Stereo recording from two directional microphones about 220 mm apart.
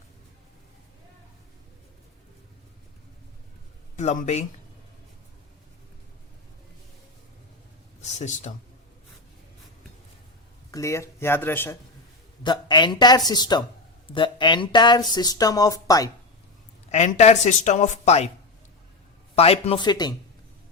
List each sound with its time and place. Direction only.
3.9 s speech: 35° left (ahead or behind)
8.0 s speech: 30° left (ahead or behind)
10.7 s speech: 15° left (ahead or behind)
12.4 s speech: 20° left (ahead or behind)
16.9 s speech: 30° left (ahead or behind)
19.4 s speech: 25° left (ahead or behind)